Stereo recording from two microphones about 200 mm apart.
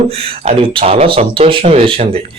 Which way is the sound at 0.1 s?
30° right (ahead or behind).